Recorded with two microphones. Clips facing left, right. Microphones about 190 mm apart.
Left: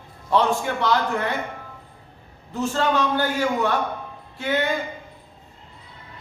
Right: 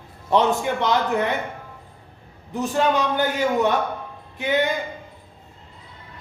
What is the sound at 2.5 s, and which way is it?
Speech, 15° right (ahead or behind).